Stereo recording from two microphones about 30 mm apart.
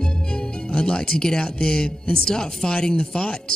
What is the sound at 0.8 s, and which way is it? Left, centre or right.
Speech, left.